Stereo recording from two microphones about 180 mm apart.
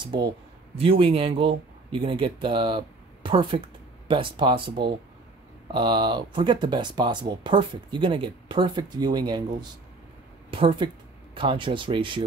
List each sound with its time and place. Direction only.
0.0 s speech: 25° right (ahead or behind)